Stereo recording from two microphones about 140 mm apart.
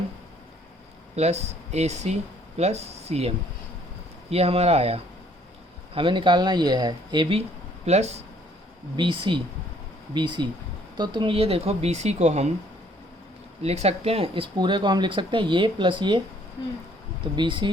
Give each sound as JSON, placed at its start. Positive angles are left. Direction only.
{"t": 1.1, "sound": "speech", "side_deg": -50}
{"t": 5.9, "sound": "speech", "side_deg": -35}
{"t": 7.9, "sound": "speech", "side_deg": -50}
{"t": 9.0, "sound": "speech", "side_deg": -35}
{"t": 13.6, "sound": "speech", "side_deg": -50}
{"t": 17.3, "sound": "speech", "side_deg": -35}